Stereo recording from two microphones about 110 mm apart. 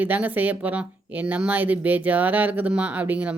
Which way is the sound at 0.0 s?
15° right (ahead or behind).